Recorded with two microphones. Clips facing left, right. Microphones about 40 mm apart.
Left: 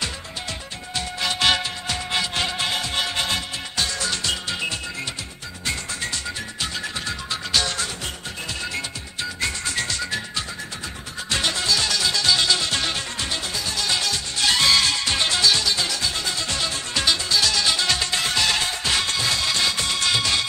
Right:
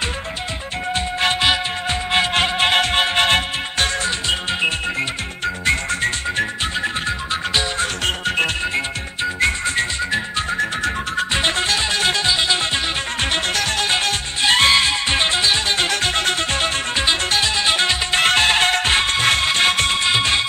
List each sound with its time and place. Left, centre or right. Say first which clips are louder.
1.9 s music: right 8 dB; right
4.3 s music: right 6 dB; right
5.7 s music: right 8 dB; right
6.8 s music: right 7 dB; right
7.8 s music: right 9 dB; right
8.7 s music: right 7 dB; right
11.3 s music: right 1 dB; right
12.3 s music: right 2 dB; right
13.2 s music: right 7 dB; right
13.7 s music: right 5 dB; right
20.0 s music: right 4 dB; right